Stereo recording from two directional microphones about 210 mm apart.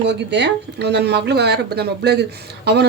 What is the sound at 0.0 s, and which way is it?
A woman's voice, 55° right (ahead or behind).